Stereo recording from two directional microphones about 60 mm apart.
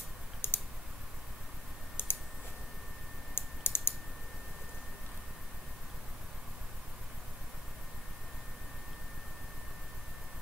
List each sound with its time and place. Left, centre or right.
0.4 s clicking: left
2.0 s clicking: left
3.3 s typing: left